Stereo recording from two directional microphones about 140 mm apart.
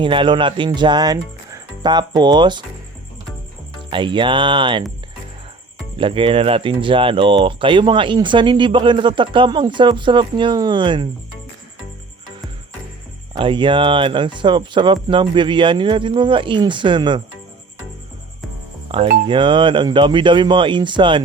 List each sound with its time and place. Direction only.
0.0 s speech: 35° right (ahead or behind)
3.8 s speech: 35° right (ahead or behind)
6.0 s speech: 40° right (ahead or behind)
13.3 s speech: 35° right (ahead or behind)
18.9 s speech: 40° right (ahead or behind)